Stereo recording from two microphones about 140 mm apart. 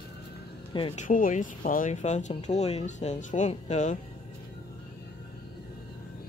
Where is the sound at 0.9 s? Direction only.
70° left (ahead or behind).